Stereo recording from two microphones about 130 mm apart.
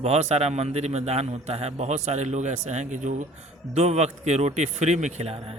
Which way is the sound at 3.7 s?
55° right (ahead or behind).